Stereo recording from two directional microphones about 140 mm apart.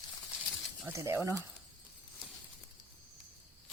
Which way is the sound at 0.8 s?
20° right (ahead or behind).